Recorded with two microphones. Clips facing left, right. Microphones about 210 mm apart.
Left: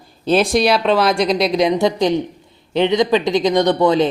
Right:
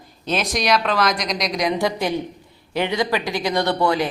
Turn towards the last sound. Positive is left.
turn(degrees=20)  # may be behind; listen again after turning